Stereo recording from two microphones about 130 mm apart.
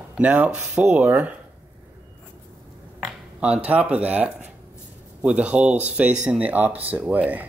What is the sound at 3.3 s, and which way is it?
Speech, 10° right (ahead or behind).